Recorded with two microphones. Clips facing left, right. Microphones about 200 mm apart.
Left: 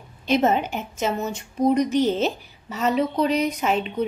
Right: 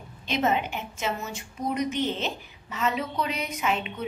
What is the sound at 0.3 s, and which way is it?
A woman's voice, 40° left (ahead or behind).